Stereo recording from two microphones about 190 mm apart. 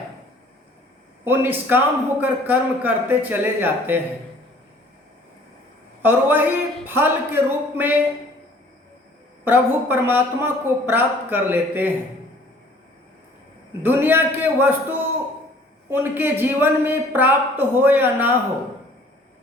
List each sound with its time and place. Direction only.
1.2 s a man's voice: 10° right (ahead or behind)
6.0 s a man's voice: 10° right (ahead or behind)
9.4 s a man's voice: 10° right (ahead or behind)
13.8 s a man's voice: 10° right (ahead or behind)